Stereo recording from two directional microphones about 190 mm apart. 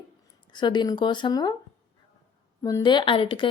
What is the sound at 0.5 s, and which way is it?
A woman's voice, 25° left (ahead or behind).